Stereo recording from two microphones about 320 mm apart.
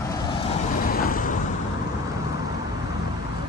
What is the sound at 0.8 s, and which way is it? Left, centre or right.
Vehicle, left.